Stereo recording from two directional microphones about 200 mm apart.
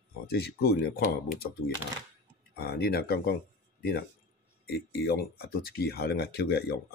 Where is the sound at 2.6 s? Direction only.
50° left (ahead or behind).